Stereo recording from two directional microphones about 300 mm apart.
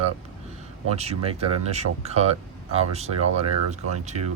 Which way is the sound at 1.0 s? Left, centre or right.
Centre.